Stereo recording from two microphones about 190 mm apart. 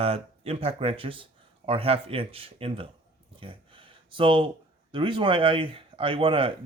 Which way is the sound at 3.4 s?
30° right (ahead or behind).